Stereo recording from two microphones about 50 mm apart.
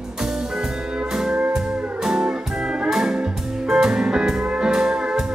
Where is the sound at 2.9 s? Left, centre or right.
Centre.